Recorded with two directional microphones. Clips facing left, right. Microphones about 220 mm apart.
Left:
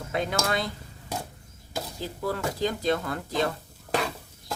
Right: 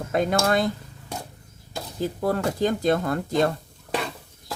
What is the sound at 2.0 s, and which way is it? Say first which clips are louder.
Speech: right 7 dB; 50° right (ahead or behind).